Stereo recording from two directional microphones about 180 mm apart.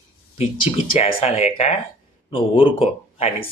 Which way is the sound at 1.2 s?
35° left (ahead or behind).